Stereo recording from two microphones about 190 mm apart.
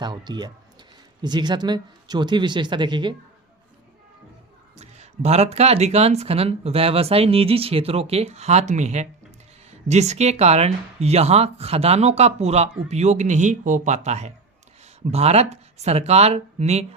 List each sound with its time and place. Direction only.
0.0 s speech: 20° right (ahead or behind)
4.8 s speech: 35° right (ahead or behind)